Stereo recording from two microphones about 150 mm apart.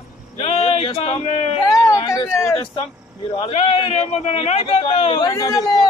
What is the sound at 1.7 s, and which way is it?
Speech, 20° left (ahead or behind).